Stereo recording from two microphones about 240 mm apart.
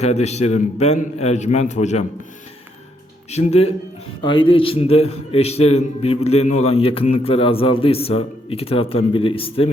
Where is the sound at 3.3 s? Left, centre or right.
Left.